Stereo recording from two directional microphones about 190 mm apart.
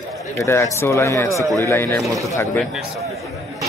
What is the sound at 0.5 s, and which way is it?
Speech, 15° left (ahead or behind).